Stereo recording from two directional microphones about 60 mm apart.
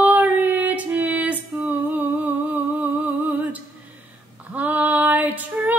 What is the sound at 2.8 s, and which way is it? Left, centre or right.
Humming, right.